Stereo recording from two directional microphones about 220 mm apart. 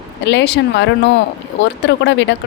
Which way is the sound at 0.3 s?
50° left (ahead or behind).